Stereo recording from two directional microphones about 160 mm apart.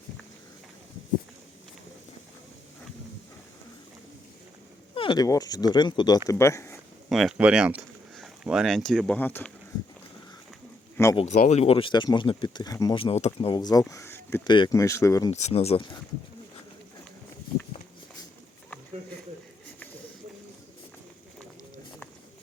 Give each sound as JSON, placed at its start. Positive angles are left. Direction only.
{"t": 4.9, "sound": "speech", "side_deg": 30}
{"t": 7.1, "sound": "speech", "side_deg": 0}
{"t": 10.9, "sound": "speech", "side_deg": 15}
{"t": 11.4, "sound": "speech", "side_deg": 40}
{"t": 13.0, "sound": "speech", "side_deg": 40}
{"t": 13.5, "sound": "speech", "side_deg": 25}
{"t": 14.4, "sound": "speech", "side_deg": 30}
{"t": 15.3, "sound": "speech", "side_deg": 45}